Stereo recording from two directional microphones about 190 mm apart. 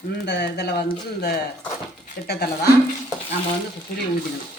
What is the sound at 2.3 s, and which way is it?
Speech, 55° left (ahead or behind).